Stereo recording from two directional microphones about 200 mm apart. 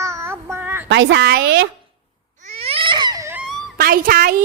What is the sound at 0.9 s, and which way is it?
Speech, 60° right (ahead or behind).